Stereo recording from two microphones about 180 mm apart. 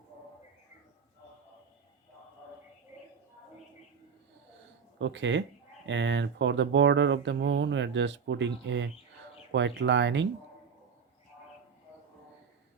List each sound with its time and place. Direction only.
4.9 s speech: 90° right